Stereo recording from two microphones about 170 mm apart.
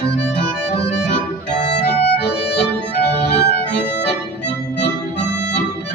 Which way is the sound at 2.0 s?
75° left (ahead or behind).